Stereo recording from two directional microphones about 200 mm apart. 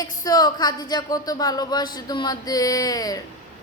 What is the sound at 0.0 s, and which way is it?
A woman's voice, 20° left (ahead or behind).